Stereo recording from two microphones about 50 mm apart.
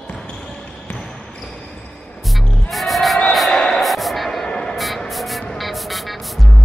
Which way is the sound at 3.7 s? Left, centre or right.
Centre.